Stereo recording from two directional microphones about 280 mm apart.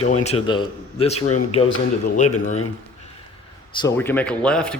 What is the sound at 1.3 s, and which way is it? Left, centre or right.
Speech, left.